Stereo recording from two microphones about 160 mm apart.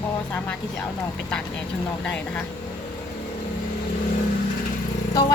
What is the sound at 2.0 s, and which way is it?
Speech, 5° left (ahead or behind).